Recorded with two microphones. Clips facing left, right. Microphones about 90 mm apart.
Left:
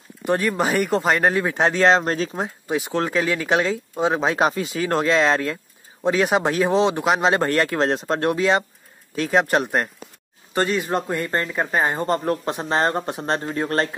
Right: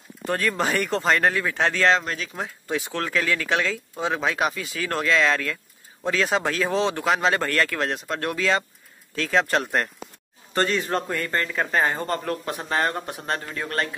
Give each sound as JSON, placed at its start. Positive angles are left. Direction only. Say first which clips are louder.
{"t": 0.3, "sound": "speech", "louder": "left 3 dB", "side_deg": 15}
{"t": 2.0, "sound": "speech", "louder": "left 8 dB", "side_deg": 35}
{"t": 2.3, "sound": "speech", "louder": "left 4 dB", "side_deg": 20}